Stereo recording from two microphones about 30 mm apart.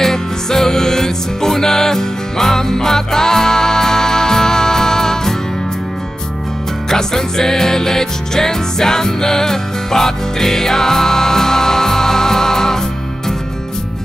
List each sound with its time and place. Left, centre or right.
0.0 s music: centre
6.9 s music: centre